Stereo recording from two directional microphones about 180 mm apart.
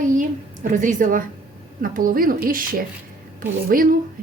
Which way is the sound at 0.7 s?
45° right (ahead or behind).